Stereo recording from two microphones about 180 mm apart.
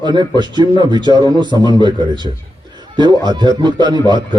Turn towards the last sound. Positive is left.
turn(degrees=-25)  # may be behind; listen again after turning